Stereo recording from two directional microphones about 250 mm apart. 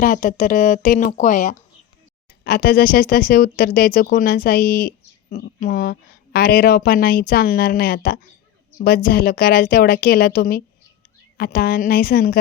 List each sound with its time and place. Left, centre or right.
0.0 s speech: left